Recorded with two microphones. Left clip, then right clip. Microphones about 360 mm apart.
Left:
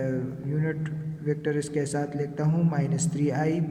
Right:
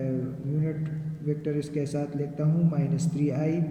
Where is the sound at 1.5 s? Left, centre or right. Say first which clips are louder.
Left 3 dB; centre.